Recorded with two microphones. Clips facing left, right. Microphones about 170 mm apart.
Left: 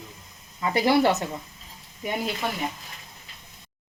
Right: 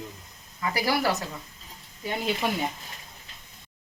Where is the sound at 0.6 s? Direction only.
25° left (ahead or behind).